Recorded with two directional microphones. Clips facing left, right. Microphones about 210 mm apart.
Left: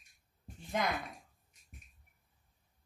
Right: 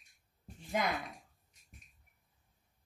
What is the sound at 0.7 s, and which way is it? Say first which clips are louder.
Speech: even; centre (ahead or behind).